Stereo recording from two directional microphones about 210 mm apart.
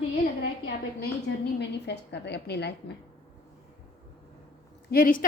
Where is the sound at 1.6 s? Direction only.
55° left (ahead or behind).